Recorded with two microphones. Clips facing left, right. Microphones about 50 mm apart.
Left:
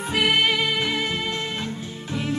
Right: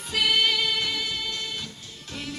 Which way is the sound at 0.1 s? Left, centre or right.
Left.